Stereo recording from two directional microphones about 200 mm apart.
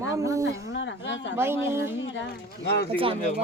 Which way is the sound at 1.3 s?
10° right (ahead or behind).